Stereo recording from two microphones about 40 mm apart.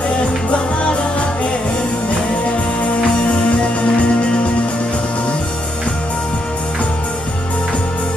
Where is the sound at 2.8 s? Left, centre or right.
Left.